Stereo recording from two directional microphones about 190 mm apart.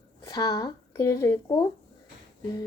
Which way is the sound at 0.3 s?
20° left (ahead or behind).